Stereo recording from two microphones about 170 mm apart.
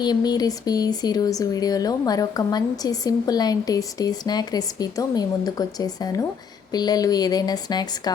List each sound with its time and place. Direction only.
0.0 s speech: 25° left (ahead or behind)